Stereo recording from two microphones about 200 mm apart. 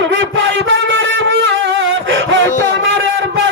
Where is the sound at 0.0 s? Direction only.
70° right (ahead or behind).